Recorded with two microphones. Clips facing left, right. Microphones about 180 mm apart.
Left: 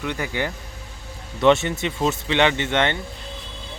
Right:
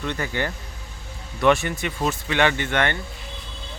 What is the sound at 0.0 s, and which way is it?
Speech, 10° left (ahead or behind).